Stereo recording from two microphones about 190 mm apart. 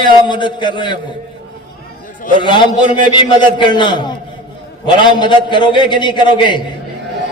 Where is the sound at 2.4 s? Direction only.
25° left (ahead or behind).